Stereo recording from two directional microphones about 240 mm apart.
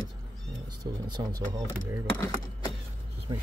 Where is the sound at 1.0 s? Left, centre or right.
Centre.